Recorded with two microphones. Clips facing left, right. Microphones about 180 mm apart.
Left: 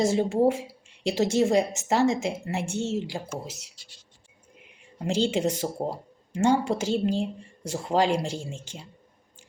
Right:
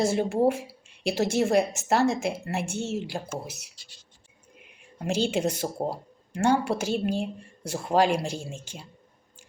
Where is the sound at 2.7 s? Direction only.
15° right (ahead or behind).